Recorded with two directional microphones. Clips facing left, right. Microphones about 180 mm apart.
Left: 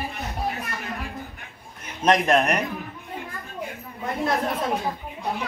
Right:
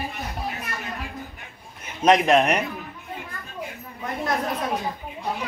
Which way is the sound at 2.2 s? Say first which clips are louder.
Right 2 dB; 20° right (ahead or behind).